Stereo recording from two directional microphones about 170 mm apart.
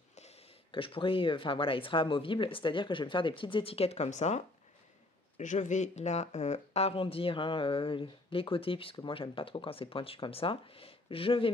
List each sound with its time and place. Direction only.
0.1 s speech: 35° left (ahead or behind)